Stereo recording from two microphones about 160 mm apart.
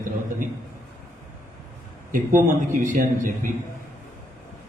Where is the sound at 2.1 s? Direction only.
55° right (ahead or behind).